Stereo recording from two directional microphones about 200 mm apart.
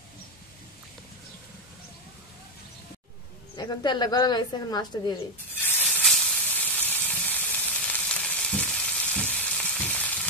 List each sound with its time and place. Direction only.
3.5 s a woman's voice: 20° left (ahead or behind)
5.5 s hiss: 10° left (ahead or behind)